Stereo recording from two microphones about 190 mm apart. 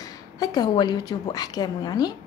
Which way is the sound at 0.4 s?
20° left (ahead or behind).